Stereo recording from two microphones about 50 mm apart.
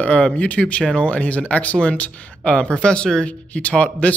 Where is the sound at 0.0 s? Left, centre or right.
Left.